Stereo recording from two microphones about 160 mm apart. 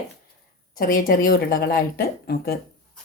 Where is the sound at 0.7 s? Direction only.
60° left (ahead or behind).